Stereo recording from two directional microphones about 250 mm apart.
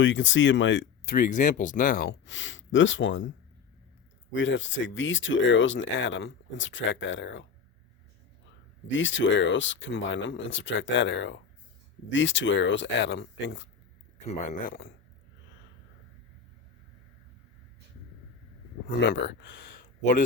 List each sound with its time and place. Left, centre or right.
0.0 s speech: left
1.1 s speech: left
9.0 s speech: left
14.3 s speech: left
18.9 s speech: left